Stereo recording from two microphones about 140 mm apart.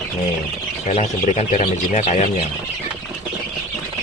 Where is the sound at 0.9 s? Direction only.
50° left (ahead or behind).